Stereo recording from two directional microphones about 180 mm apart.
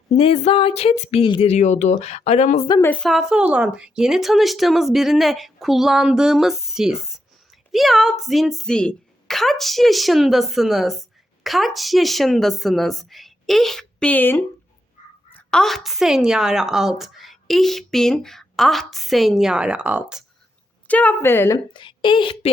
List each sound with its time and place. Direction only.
0.1 s speech: 35° left (ahead or behind)
2.8 s a woman's voice: 5° left (ahead or behind)
20.8 s a woman's voice: 10° left (ahead or behind)
21.7 s a woman's voice: 25° left (ahead or behind)